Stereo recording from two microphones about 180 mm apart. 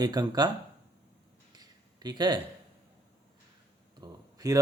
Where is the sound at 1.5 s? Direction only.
20° right (ahead or behind).